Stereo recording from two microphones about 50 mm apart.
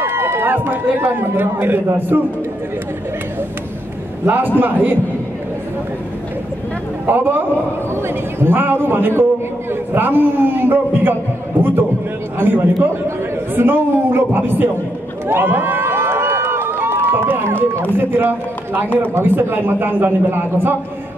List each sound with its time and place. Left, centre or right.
0.0 s a man's voice: right
4.6 s a man's voice: right
7.1 s a man's voice: right
15.2 s run: right
17.9 s a man's voice: right